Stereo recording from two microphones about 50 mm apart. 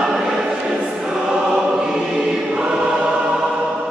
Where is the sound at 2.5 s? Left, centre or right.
Centre.